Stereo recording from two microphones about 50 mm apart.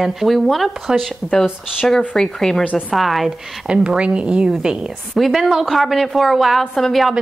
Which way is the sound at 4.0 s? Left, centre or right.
Right.